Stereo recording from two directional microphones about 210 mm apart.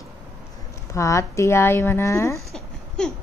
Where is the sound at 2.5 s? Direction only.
5° left (ahead or behind).